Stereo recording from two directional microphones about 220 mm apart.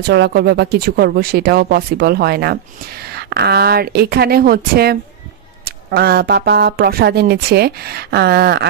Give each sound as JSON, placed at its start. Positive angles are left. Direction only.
{"t": 0.0, "sound": "speech", "side_deg": -50}